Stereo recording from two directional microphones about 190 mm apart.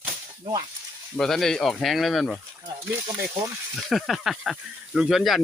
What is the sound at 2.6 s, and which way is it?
Speech, 20° right (ahead or behind).